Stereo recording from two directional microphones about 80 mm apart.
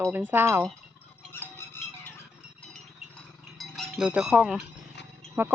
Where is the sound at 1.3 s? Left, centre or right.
Left.